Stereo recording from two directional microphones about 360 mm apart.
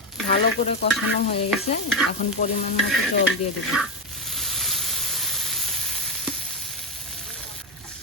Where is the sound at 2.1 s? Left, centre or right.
Centre.